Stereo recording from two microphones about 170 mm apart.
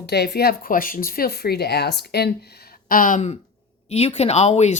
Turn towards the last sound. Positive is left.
turn(degrees=40)  # may be behind; listen again after turning